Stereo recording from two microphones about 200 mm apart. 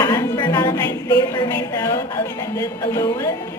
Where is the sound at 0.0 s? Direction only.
15° left (ahead or behind).